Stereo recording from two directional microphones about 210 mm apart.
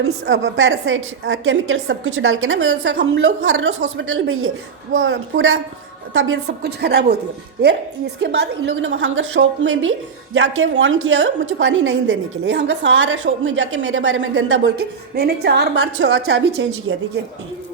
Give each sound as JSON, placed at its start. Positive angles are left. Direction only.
{"t": 0.3, "sound": "a woman's voice", "side_deg": -65}
{"t": 6.7, "sound": "a woman's voice", "side_deg": -50}
{"t": 8.2, "sound": "a woman's voice", "side_deg": -55}
{"t": 15.1, "sound": "a woman's voice", "side_deg": -50}